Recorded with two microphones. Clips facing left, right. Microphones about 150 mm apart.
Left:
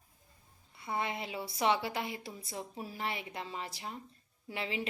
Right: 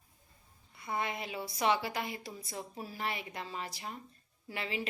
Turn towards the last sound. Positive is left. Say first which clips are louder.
# left 1 dB
turn(degrees=25)  # may be behind; listen again after turning